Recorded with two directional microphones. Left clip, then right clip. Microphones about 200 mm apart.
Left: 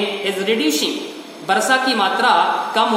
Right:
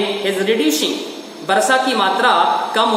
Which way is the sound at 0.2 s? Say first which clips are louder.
Right 2 dB; 10° left (ahead or behind).